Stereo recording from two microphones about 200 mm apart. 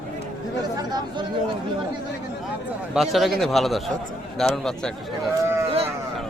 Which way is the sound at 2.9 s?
Centre (ahead or behind).